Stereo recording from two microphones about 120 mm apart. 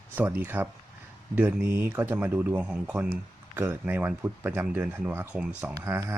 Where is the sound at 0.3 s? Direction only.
15° right (ahead or behind).